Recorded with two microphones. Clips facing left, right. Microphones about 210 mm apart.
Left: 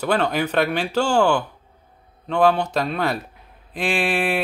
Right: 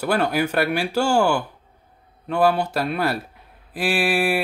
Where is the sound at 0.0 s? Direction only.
10° right (ahead or behind).